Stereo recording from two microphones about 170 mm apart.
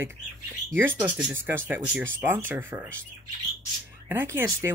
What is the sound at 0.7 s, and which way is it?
Speech, 10° right (ahead or behind).